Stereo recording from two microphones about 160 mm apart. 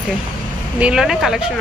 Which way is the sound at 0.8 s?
5° right (ahead or behind).